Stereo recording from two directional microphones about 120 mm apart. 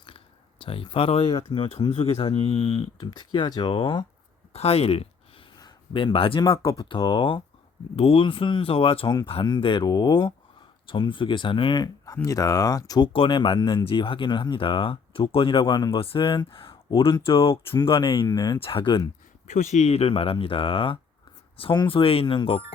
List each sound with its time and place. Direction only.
0.6 s speech: 45° left (ahead or behind)
3.0 s speech: 35° left (ahead or behind)
4.5 s a sound: 60° left (ahead or behind)
5.5 s a sound: 40° left (ahead or behind)
6.4 s speech: 30° left (ahead or behind)
6.8 s speech: 45° left (ahead or behind)
9.0 s speech: 35° left (ahead or behind)
13.1 s speech: 45° left (ahead or behind)
18.3 s speech: 30° left (ahead or behind)
18.6 s speech: 45° left (ahead or behind)
19.5 s speech: 75° left (ahead or behind); by 22.6 s 50° left (ahead or behind)